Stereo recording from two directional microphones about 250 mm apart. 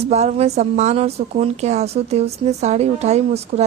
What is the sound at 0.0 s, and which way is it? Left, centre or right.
Speech, right.